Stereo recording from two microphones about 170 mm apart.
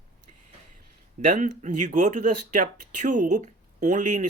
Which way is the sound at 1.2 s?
50° right (ahead or behind).